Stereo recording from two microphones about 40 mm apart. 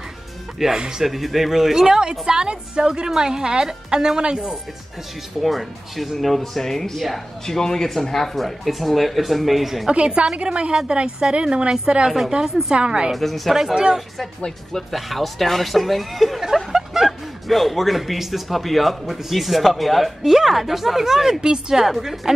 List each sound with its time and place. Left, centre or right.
0.6 s a woman's voice: centre
1.0 s a woman's voice: centre; by 4.6 s right
5.4 s speech: centre
9.8 s a woman's voice: right
12.4 s a woman's voice: centre
12.7 s a woman's voice: right
13.1 s speech: centre
14.9 s speech: centre
21.8 s a woman's voice: centre